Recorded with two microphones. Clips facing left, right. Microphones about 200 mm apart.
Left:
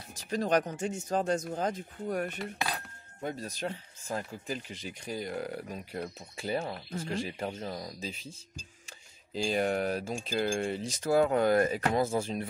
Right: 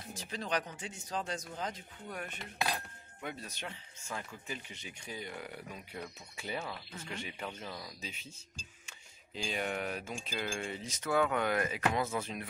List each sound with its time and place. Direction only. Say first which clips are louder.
0.3 s speech: left 9 dB; 45° left (ahead or behind); by 12.4 s 30° left (ahead or behind)